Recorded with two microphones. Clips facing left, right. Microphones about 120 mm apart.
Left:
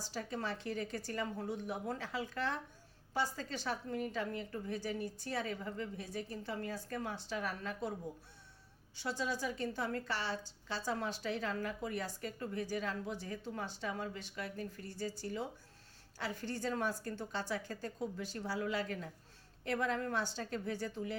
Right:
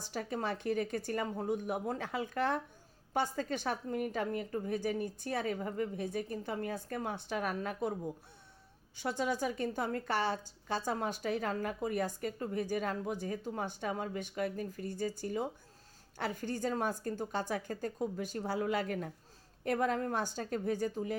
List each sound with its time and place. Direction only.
0.0 s a woman's voice: 55° right (ahead or behind)
9.0 s a woman's voice: 55° right (ahead or behind)